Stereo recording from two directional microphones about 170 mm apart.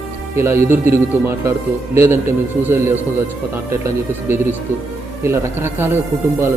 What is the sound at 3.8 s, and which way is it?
A man's voice, 15° right (ahead or behind).